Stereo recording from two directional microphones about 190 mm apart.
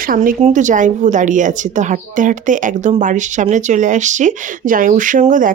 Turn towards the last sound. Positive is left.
turn(degrees=-45)  # may be behind; listen again after turning